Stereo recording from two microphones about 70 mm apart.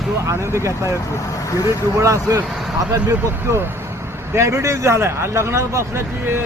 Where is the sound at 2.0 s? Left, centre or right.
Right.